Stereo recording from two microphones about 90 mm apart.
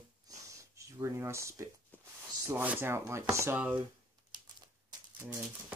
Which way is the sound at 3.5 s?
20° right (ahead or behind).